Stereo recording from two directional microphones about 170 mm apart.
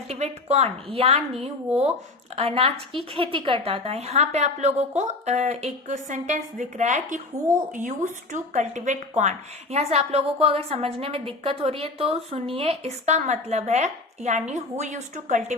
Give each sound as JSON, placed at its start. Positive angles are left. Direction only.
{"t": 0.1, "sound": "a woman's voice", "side_deg": -40}